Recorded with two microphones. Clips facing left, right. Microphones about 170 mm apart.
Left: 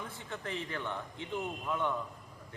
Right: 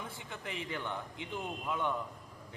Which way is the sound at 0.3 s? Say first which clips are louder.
Left 3 dB; 15° right (ahead or behind).